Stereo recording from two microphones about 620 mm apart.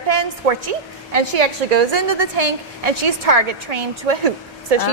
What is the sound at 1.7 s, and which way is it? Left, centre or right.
Speech, right.